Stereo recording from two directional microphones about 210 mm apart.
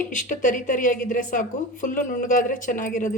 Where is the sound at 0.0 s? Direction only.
35° left (ahead or behind).